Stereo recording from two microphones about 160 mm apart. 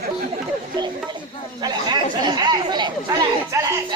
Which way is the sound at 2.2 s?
25° right (ahead or behind).